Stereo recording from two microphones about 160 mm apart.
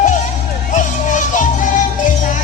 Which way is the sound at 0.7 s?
50° left (ahead or behind).